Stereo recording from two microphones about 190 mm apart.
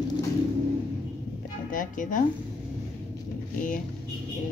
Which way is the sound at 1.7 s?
45° left (ahead or behind).